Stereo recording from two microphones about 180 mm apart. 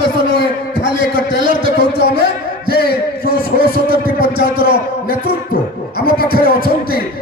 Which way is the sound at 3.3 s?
55° right (ahead or behind).